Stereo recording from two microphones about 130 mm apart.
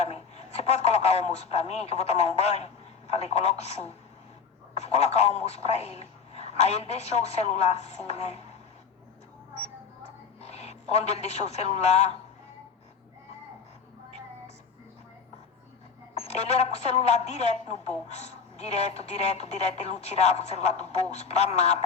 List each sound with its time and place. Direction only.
0.0 s a woman's voice: 55° left (ahead or behind)
10.4 s a man's voice: 55° left (ahead or behind)
16.1 s a woman's voice: 55° left (ahead or behind)